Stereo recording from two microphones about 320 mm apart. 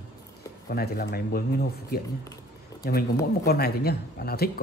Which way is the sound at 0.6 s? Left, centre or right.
Left.